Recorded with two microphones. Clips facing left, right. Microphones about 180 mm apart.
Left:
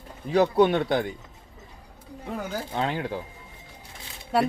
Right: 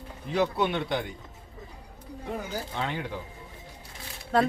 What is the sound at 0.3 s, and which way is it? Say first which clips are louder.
Speech: left 7 dB; 40° left (ahead or behind).